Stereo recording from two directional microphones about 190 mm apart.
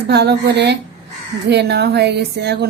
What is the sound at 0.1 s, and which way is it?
A woman's voice, 60° right (ahead or behind).